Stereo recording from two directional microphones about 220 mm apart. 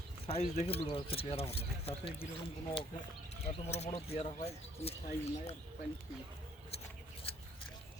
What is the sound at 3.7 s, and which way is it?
Speech, 30° left (ahead or behind).